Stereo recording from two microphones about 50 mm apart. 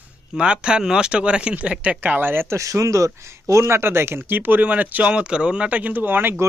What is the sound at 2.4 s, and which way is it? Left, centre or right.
Speech, right.